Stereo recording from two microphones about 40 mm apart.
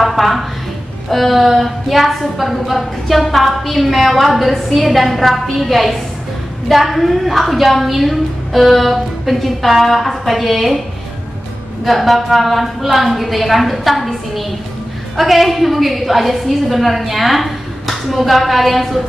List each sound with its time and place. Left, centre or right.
0.0 s a woman's voice: centre
11.8 s a woman's voice: centre